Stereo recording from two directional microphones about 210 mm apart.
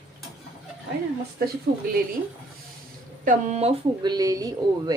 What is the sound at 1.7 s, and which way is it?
Speech, 50° right (ahead or behind).